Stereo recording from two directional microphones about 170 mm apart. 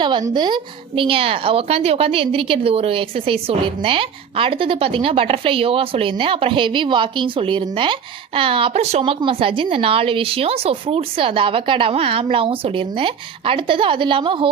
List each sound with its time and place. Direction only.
0.0 s a woman's voice: 25° right (ahead or behind)